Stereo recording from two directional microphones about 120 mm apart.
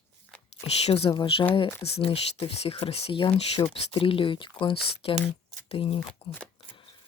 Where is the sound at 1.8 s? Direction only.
60° left (ahead or behind).